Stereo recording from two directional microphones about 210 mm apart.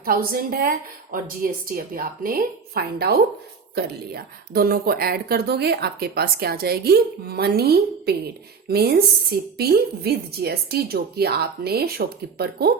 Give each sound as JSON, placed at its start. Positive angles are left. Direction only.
{"t": 0.0, "sound": "speech", "side_deg": -45}